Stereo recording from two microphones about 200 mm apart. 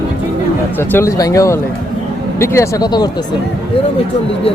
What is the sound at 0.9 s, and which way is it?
Speech, 15° left (ahead or behind).